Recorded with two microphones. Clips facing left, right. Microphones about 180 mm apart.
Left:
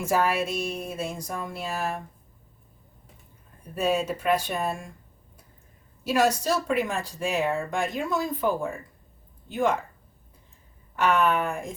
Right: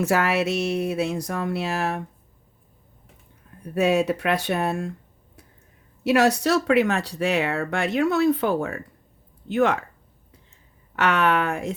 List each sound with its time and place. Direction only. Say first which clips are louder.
0.0 s speech: right 3 dB; 75° right (ahead or behind)
3.8 s speech: right 5 dB; 70° right (ahead or behind)
6.0 s speech: right 4 dB; 70° right (ahead or behind)
10.9 s speech: right 2 dB; 75° right (ahead or behind)